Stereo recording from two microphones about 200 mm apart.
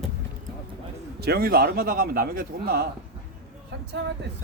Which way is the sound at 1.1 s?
50° right (ahead or behind).